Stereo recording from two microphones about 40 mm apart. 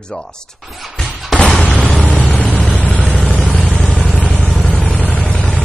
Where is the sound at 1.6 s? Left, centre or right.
Left.